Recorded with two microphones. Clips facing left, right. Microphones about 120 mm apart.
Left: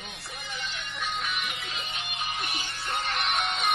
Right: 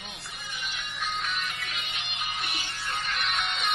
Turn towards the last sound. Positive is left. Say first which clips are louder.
# left 2 dB
turn(degrees=45)  # may be behind; listen again after turning